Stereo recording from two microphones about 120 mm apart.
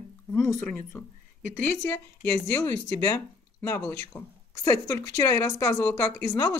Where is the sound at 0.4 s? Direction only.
20° left (ahead or behind).